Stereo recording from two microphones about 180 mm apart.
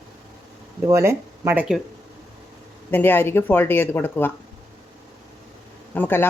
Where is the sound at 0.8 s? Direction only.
15° right (ahead or behind).